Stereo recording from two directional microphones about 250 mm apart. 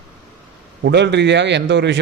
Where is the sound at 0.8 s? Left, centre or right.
Right.